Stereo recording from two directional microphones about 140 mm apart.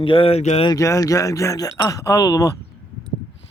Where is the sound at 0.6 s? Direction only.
25° left (ahead or behind).